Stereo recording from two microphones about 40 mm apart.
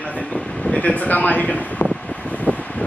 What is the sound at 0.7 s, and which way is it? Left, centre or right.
Speech, left.